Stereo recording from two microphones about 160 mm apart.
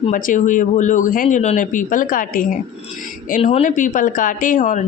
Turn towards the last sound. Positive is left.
turn(degrees=50)  # may be behind; listen again after turning